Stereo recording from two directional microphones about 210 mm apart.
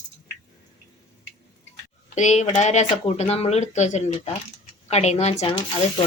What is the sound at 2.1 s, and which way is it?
Speech, 35° left (ahead or behind).